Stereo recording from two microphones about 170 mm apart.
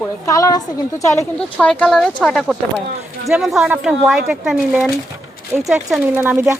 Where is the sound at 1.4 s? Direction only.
5° left (ahead or behind).